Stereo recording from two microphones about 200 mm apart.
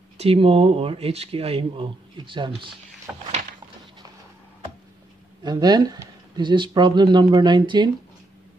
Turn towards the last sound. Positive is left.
turn(degrees=-25)  # may be behind; listen again after turning